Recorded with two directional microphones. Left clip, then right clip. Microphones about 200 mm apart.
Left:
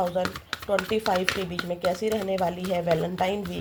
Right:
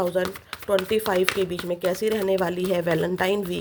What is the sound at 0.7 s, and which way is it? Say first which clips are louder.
Speech: right 2 dB; 45° right (ahead or behind).